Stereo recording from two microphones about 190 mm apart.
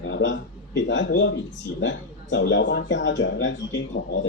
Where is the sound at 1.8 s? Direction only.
75° left (ahead or behind).